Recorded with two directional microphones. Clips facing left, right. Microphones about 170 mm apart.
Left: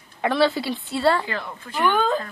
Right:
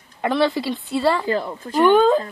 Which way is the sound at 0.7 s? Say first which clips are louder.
Right 1 dB; centre (ahead or behind).